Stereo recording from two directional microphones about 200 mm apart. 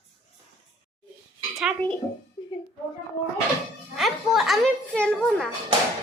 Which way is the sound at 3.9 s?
Centre (ahead or behind).